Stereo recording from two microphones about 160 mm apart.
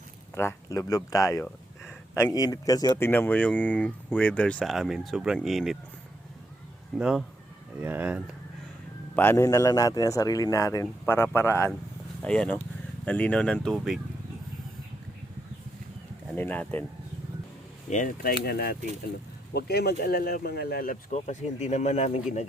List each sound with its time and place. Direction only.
0.3 s speech: 15° left (ahead or behind)
3.1 s speech: 10° left (ahead or behind)
7.0 s speech: 5° right (ahead or behind)
9.1 s a man's voice: 15° left (ahead or behind); by 14.0 s centre (ahead or behind)
16.3 s speech: 10° left (ahead or behind)
17.8 s speech: 50° left (ahead or behind)
18.4 s speech: 70° left (ahead or behind)
19.5 s speech: 90° left; by 22.2 s 45° left (ahead or behind)